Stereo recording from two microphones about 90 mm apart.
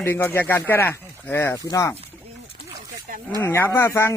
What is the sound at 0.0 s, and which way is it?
Speech, 25° left (ahead or behind).